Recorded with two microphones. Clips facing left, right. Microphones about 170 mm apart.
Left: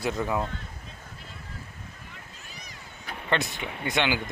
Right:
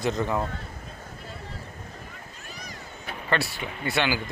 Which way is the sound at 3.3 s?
20° left (ahead or behind).